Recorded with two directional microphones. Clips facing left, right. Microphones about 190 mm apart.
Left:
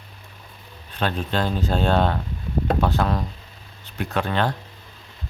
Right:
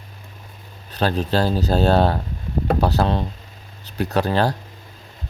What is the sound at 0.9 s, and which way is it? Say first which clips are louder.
Speech: right 4 dB; 40° right (ahead or behind).